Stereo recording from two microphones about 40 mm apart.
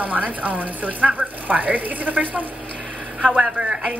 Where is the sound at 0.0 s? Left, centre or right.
Right.